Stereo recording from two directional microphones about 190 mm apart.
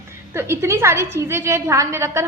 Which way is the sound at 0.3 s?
15° right (ahead or behind).